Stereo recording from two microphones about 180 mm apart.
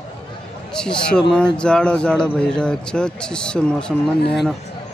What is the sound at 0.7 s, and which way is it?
Speech, 5° left (ahead or behind).